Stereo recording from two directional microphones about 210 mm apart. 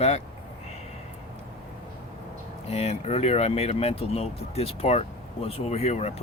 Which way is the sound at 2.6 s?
30° left (ahead or behind).